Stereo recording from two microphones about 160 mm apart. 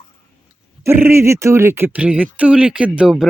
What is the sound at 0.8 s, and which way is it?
Speech, 15° right (ahead or behind).